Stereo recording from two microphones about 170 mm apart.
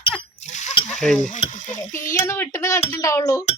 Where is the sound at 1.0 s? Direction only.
5° left (ahead or behind).